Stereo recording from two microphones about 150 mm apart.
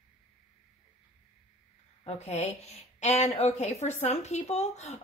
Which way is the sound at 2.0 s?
45° left (ahead or behind).